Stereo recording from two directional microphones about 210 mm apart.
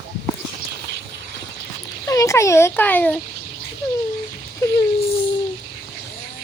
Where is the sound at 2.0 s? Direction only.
15° left (ahead or behind).